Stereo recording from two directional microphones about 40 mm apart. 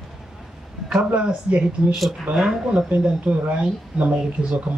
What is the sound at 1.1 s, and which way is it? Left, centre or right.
Speech, right.